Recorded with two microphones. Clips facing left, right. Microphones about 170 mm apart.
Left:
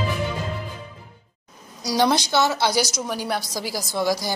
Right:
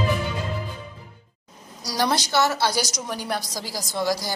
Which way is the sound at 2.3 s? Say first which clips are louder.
Left 1 dB; 15° left (ahead or behind).